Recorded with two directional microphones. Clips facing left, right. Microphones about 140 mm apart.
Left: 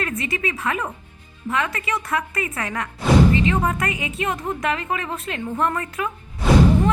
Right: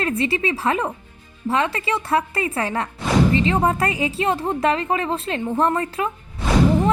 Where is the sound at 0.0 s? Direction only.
30° right (ahead or behind).